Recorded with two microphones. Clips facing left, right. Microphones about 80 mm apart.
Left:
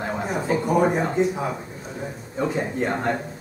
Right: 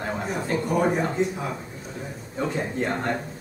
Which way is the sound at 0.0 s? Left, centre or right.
Centre.